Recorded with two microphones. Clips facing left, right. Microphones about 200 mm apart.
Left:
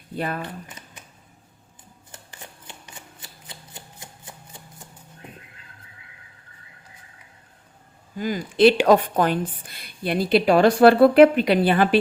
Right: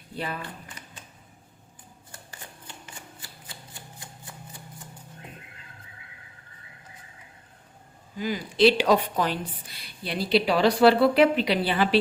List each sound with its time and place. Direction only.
0.2 s a woman's voice: 50° left (ahead or behind)
0.4 s shuffling cards: 20° left (ahead or behind)
2.8 s shuffling cards: 20° left (ahead or behind)
8.2 s a woman's voice: 50° left (ahead or behind)